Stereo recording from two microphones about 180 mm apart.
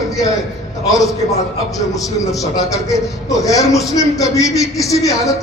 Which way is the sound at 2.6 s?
20° left (ahead or behind).